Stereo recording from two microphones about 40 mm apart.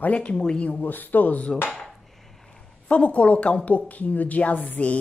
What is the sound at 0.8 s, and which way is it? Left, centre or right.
Speech, left.